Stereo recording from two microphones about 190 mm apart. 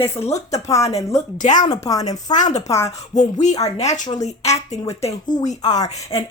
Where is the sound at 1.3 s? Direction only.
40° left (ahead or behind).